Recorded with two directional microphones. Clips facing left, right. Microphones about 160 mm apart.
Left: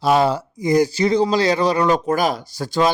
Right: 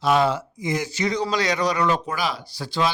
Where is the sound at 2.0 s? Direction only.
45° left (ahead or behind).